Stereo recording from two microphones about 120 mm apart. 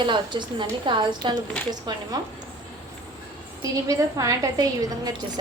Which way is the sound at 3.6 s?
30° right (ahead or behind).